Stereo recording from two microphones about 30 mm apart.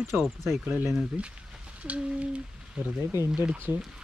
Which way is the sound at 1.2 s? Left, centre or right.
Right.